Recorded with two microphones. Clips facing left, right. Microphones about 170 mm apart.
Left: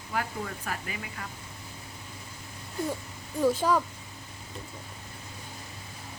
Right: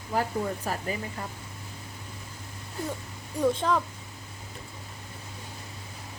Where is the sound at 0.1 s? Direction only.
35° right (ahead or behind).